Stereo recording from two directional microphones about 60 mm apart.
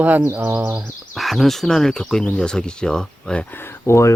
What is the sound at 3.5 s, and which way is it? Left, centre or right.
Speech, left.